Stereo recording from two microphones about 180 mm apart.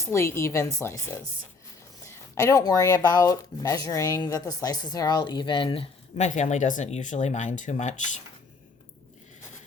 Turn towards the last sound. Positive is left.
turn(degrees=40)  # may be behind; listen again after turning